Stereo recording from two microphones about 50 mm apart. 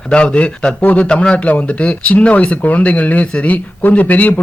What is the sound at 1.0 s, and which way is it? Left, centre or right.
Speech, centre.